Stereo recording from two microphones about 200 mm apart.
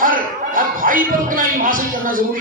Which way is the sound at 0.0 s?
45° right (ahead or behind).